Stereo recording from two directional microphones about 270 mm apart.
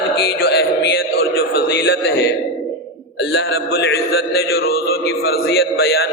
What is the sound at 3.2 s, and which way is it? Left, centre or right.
A man's voice, left.